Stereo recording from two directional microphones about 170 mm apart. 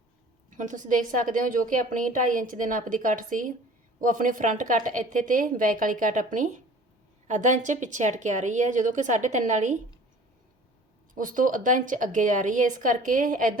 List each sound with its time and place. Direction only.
0.5 s a woman's voice: 50° right (ahead or behind)
11.1 s a woman's voice: 50° right (ahead or behind)